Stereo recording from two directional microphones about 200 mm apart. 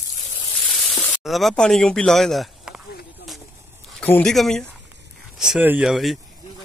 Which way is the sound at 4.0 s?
5° left (ahead or behind).